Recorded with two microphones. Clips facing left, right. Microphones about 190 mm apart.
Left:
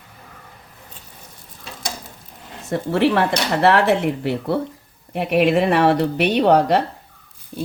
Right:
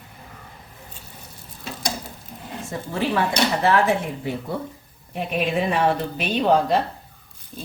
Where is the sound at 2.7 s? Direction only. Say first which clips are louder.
Left 8 dB; 70° left (ahead or behind).